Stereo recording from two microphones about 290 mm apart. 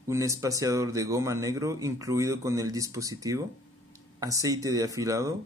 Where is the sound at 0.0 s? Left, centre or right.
Centre.